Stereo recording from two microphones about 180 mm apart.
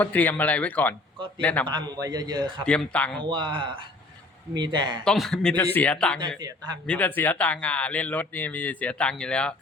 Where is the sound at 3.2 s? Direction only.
25° right (ahead or behind).